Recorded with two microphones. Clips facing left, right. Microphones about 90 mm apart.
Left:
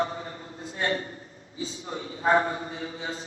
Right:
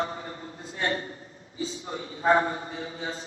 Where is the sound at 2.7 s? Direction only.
35° right (ahead or behind).